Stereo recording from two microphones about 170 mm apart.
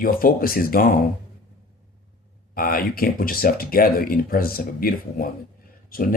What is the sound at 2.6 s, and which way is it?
Speech, 60° left (ahead or behind).